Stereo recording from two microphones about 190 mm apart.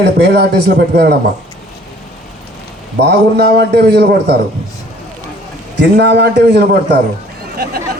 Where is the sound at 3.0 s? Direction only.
60° right (ahead or behind).